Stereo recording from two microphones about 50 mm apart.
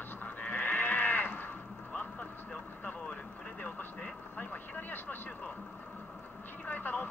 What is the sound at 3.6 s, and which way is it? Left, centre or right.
Vehicle, left.